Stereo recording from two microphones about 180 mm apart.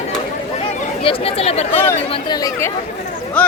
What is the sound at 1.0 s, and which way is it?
Speech, 35° left (ahead or behind).